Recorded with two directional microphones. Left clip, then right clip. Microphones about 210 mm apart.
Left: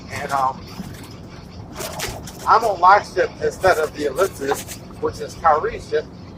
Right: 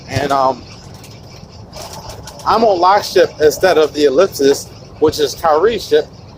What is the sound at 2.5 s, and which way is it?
Speech, 55° right (ahead or behind).